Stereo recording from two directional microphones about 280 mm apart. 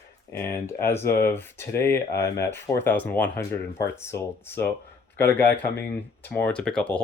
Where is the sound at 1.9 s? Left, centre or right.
Left.